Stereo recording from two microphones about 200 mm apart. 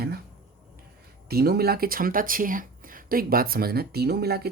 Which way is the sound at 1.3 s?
50° right (ahead or behind).